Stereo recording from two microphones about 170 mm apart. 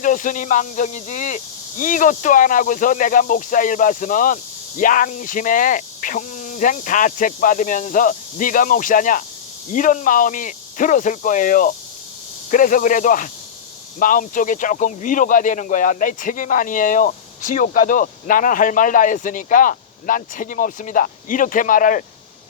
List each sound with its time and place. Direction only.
0.0 s speech: 50° left (ahead or behind)